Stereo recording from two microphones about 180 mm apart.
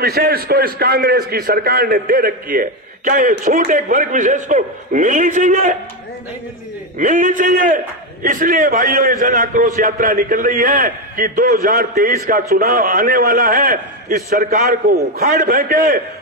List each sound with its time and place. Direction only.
0.0 s a man's voice: 60° right (ahead or behind); by 5.8 s 45° right (ahead or behind)
7.0 s a man's voice: 45° right (ahead or behind)